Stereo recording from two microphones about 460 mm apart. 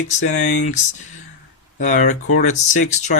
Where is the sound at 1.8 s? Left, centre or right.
Centre.